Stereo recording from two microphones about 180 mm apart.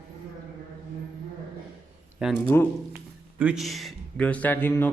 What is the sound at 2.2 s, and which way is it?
Speech, 5° right (ahead or behind).